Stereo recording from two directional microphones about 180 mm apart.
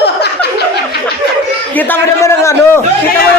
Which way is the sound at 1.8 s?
15° left (ahead or behind).